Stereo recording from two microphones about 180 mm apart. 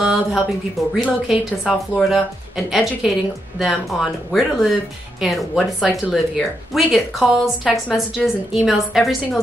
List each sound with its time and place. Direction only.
0.0 s speech: centre (ahead or behind)
4.3 s speech: centre (ahead or behind)